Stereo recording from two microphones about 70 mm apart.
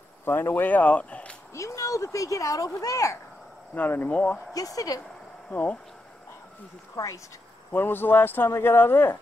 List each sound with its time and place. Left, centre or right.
0.2 s speech: left
1.5 s speech: left
3.7 s speech: left
4.6 s speech: left
5.5 s speech: left
7.0 s speech: left
7.7 s speech: left